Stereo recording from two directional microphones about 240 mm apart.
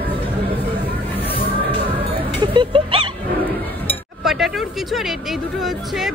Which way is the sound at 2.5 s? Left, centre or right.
Right.